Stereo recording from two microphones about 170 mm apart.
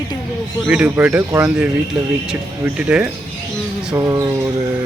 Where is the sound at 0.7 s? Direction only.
10° right (ahead or behind).